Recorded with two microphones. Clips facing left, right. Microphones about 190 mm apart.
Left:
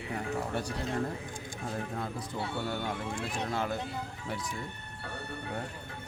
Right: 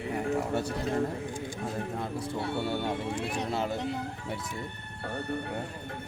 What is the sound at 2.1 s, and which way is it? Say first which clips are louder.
Speech: right 4 dB; 25° right (ahead or behind).